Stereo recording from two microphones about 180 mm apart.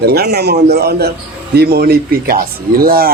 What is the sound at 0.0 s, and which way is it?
Speech, 60° right (ahead or behind).